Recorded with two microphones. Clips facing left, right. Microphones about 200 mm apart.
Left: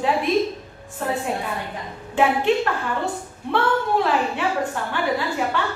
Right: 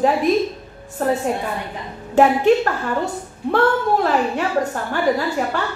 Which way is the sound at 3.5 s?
40° right (ahead or behind).